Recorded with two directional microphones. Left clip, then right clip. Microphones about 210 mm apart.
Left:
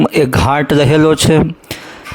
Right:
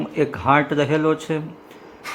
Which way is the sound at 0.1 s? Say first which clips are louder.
Left 6 dB; 50° left (ahead or behind).